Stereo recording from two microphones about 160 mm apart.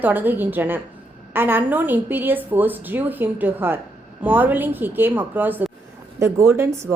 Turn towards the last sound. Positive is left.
turn(degrees=-15)  # may be behind; listen again after turning